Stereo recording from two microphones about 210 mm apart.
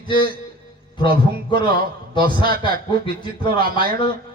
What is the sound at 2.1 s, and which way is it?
Speech, 20° left (ahead or behind).